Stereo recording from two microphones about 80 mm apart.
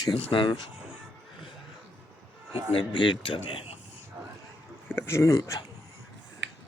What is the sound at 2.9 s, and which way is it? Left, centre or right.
Speech, left.